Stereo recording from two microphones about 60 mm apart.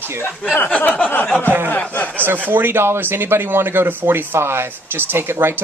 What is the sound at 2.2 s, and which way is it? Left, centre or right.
Speech, right.